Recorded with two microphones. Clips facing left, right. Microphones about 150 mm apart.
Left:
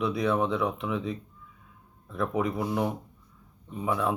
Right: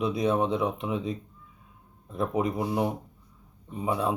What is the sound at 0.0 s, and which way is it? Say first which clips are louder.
A man's voice: right 1 dB; 20° right (ahead or behind).